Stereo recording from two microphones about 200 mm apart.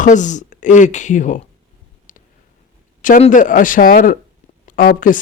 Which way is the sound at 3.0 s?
40° left (ahead or behind).